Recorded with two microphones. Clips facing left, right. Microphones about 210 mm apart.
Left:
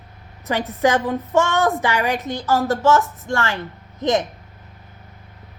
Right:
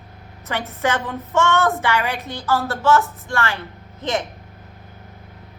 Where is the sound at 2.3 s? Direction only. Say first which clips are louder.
Left 2 dB; 45° left (ahead or behind).